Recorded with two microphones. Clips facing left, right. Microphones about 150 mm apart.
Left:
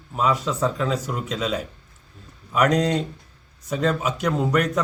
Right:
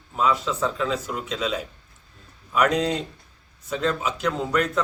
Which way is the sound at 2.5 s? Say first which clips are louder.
Left 2 dB; 5° right (ahead or behind).